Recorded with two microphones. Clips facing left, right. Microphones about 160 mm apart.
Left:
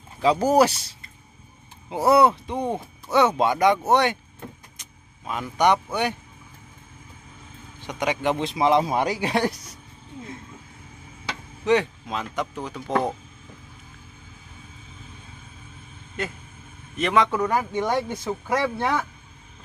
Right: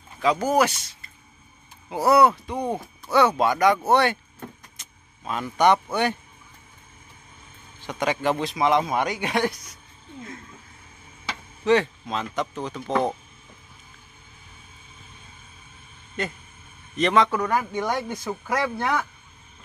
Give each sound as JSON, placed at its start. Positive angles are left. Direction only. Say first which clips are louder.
{"t": 0.2, "sound": "speech", "louder": "left 3 dB", "side_deg": 35}
{"t": 7.8, "sound": "speech", "louder": "even", "side_deg": 15}
{"t": 11.6, "sound": "speech", "louder": "right 1 dB", "side_deg": 15}
{"t": 16.2, "sound": "speech", "louder": "right 1 dB", "side_deg": 5}
{"t": 17.3, "sound": "speech", "louder": "left 1 dB", "side_deg": 20}